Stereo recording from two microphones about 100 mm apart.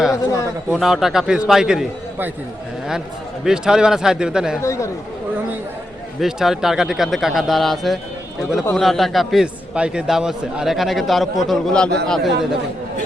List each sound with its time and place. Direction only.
0.1 s a man's voice: 30° left (ahead or behind)
0.7 s speech: 5° right (ahead or behind)
3.4 s a man's voice: 5° right (ahead or behind)
4.6 s speech: 30° left (ahead or behind)
6.1 s speech: 5° right (ahead or behind)